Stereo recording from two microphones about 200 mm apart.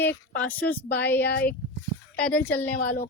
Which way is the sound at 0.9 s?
55° left (ahead or behind).